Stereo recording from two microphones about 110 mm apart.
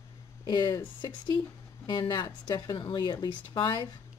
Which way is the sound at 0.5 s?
40° left (ahead or behind).